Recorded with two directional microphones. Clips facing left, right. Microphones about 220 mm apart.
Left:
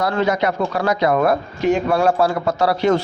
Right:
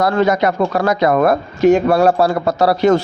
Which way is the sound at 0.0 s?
45° right (ahead or behind).